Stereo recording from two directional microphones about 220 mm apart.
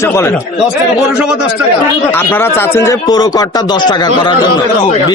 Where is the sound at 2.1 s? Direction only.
10° left (ahead or behind).